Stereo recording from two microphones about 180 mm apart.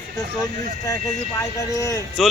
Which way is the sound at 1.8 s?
20° left (ahead or behind).